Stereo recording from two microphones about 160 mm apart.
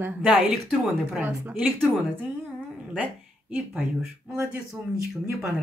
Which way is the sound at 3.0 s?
10° right (ahead or behind).